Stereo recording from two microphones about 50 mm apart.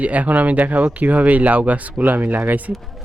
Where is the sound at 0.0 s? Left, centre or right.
Right.